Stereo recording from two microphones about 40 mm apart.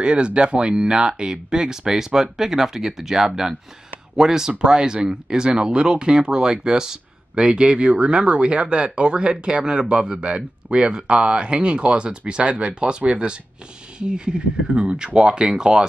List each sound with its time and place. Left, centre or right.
0.0 s speech: right